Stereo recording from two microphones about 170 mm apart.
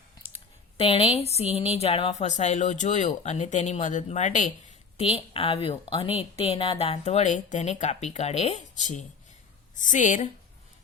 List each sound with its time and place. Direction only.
0.8 s speech: 35° left (ahead or behind)
4.9 s a woman's voice: 35° left (ahead or behind)